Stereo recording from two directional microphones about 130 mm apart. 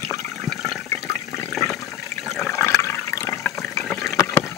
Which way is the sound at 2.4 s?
20° left (ahead or behind).